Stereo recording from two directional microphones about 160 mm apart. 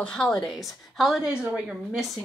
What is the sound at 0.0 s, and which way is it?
Speech, 5° left (ahead or behind).